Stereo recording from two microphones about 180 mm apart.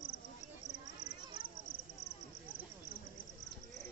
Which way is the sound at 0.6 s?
65° left (ahead or behind).